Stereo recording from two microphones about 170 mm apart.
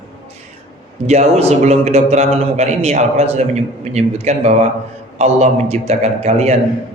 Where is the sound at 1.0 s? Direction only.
40° right (ahead or behind).